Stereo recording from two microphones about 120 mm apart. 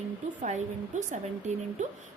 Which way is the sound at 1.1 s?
90° right.